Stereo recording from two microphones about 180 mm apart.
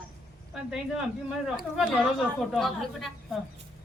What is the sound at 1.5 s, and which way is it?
A woman's voice, centre (ahead or behind).